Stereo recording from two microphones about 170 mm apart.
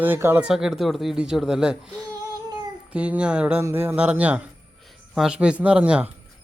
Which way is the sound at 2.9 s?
5° right (ahead or behind).